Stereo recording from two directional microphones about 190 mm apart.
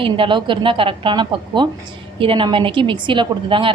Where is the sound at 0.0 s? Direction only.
25° right (ahead or behind).